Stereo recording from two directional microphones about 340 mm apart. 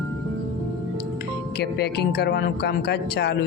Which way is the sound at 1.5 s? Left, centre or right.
Left.